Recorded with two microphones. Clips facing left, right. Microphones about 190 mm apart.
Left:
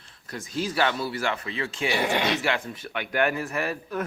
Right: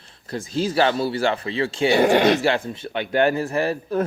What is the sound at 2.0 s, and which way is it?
Speech, 45° right (ahead or behind).